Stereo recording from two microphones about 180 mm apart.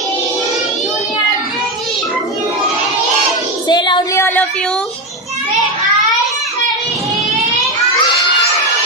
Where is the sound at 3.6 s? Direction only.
25° left (ahead or behind).